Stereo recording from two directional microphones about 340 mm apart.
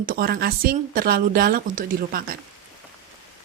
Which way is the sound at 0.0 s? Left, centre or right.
Right.